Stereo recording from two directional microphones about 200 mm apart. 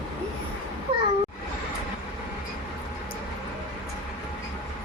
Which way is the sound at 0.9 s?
25° right (ahead or behind).